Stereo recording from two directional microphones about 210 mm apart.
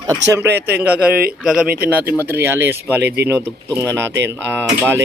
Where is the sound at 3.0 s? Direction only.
50° right (ahead or behind).